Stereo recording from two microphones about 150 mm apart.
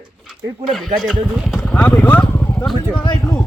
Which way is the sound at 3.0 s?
30° left (ahead or behind).